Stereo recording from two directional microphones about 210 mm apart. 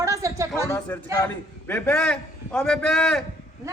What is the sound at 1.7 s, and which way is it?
A man's voice, 5° left (ahead or behind).